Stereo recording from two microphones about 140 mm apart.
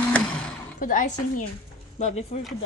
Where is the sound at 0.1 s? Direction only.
5° left (ahead or behind).